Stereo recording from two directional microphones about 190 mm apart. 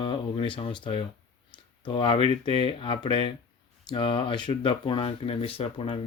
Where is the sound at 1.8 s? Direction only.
25° left (ahead or behind).